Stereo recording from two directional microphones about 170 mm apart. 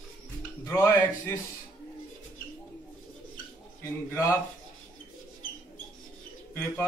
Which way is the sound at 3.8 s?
15° left (ahead or behind).